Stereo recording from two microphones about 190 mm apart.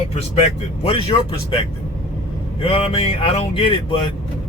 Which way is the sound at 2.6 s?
30° left (ahead or behind).